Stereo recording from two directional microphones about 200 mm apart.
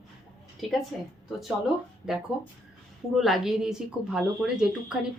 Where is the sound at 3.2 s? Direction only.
Centre (ahead or behind).